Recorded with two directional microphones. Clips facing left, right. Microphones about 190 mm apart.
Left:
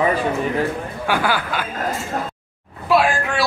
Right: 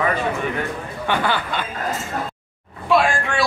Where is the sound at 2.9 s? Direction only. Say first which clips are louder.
Left 1 dB; 5° left (ahead or behind).